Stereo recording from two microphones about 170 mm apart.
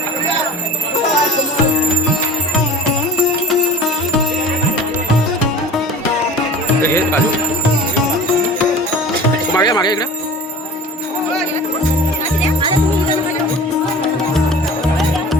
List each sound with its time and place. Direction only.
6.8 s music: 15° left (ahead or behind)
9.5 s music: 25° left (ahead or behind)